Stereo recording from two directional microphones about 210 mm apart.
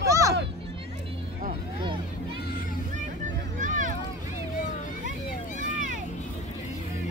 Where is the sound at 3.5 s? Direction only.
40° right (ahead or behind).